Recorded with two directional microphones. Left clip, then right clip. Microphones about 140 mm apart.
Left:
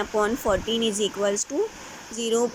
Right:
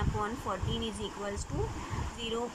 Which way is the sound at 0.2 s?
40° left (ahead or behind).